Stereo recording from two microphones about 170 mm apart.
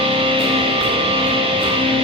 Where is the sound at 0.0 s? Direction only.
30° right (ahead or behind).